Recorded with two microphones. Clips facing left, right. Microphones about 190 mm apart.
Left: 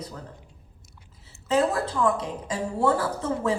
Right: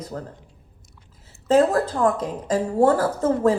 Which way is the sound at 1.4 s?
45° right (ahead or behind).